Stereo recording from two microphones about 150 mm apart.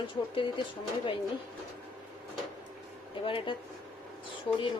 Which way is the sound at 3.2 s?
35° left (ahead or behind).